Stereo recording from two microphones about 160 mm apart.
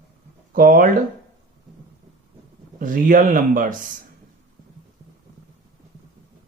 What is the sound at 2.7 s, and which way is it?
Speech, 55° right (ahead or behind).